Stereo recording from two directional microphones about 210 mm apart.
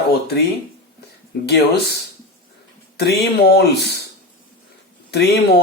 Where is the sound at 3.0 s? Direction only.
50° left (ahead or behind).